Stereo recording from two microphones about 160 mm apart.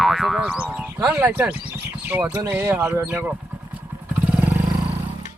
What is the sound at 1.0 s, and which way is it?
Speech, 10° right (ahead or behind).